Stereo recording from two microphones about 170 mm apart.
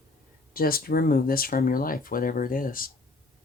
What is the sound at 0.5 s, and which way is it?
Speech, 60° left (ahead or behind).